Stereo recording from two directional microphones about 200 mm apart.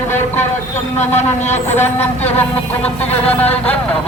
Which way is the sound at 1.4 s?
35° left (ahead or behind).